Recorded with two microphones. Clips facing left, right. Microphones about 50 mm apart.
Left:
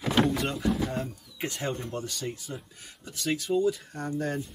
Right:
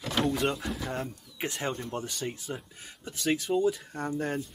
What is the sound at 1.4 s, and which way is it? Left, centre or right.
Speech, centre.